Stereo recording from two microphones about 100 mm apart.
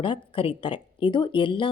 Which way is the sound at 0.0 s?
60° left (ahead or behind).